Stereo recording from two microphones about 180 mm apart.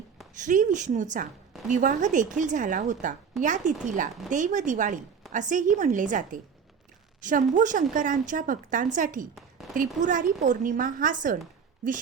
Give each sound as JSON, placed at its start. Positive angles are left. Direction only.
{"t": 0.3, "sound": "speech", "side_deg": -45}
{"t": 9.3, "sound": "a sound", "side_deg": 0}
{"t": 9.7, "sound": "speech", "side_deg": -45}